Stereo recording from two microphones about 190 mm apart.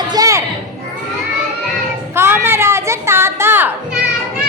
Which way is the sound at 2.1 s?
10° right (ahead or behind).